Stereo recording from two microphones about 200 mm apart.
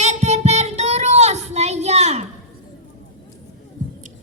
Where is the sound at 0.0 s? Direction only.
35° right (ahead or behind).